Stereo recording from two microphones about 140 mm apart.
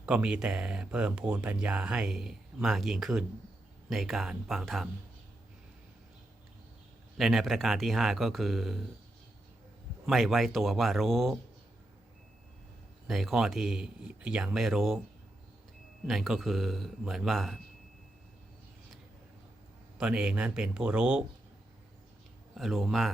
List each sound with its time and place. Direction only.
0.0 s speech: 10° right (ahead or behind)
7.2 s speech: centre (ahead or behind)
10.1 s speech: centre (ahead or behind)
13.1 s speech: centre (ahead or behind)
16.0 s speech: centre (ahead or behind)
20.0 s speech: 5° right (ahead or behind)
22.5 s speech: centre (ahead or behind)